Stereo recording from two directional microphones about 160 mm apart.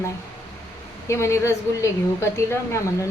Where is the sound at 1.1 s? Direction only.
15° left (ahead or behind).